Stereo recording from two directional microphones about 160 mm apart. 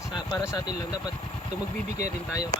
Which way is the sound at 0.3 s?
25° left (ahead or behind).